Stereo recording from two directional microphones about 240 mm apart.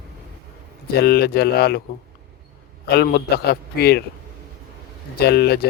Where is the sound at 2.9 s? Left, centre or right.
Left.